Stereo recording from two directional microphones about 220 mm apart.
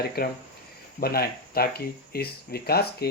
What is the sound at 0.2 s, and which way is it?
Speech, 45° left (ahead or behind).